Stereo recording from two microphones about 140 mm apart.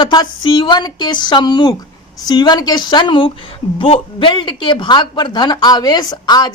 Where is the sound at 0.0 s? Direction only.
30° left (ahead or behind).